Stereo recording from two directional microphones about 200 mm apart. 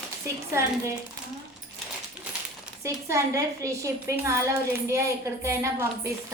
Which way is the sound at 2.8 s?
15° right (ahead or behind).